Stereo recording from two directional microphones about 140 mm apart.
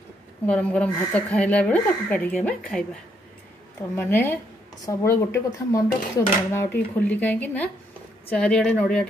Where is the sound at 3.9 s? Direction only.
15° left (ahead or behind).